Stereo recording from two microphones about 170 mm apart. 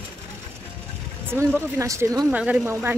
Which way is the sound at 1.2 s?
15° right (ahead or behind).